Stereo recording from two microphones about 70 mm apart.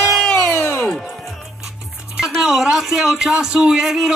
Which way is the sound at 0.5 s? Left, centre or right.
Left.